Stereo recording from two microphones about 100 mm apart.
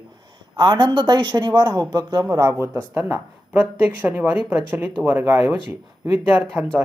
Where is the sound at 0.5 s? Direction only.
50° right (ahead or behind).